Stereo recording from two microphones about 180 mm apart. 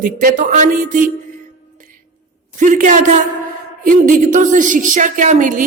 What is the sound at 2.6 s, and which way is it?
A woman's voice, 45° right (ahead or behind).